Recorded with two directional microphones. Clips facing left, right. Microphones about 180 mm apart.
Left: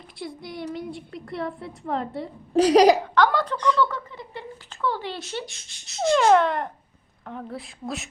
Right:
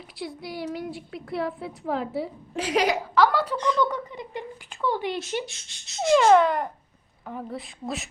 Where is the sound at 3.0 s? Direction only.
5° right (ahead or behind).